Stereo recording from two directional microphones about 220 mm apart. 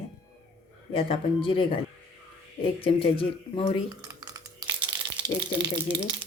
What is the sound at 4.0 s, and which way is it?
Typing, 15° right (ahead or behind).